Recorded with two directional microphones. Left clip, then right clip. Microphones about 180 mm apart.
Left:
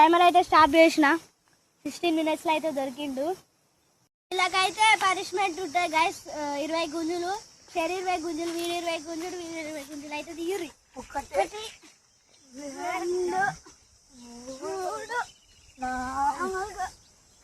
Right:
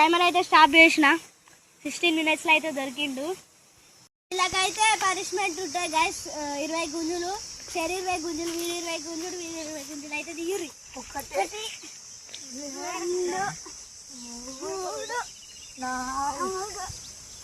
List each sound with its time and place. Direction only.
0.0 s speech: 35° left (ahead or behind)
0.5 s speech: 15° left (ahead or behind)
4.3 s speech: centre (ahead or behind)
12.7 s speech: centre (ahead or behind)
14.6 s speech: centre (ahead or behind)